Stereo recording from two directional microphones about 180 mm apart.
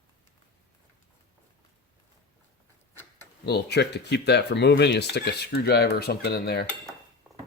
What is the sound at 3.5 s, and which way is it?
Speech, 65° left (ahead or behind).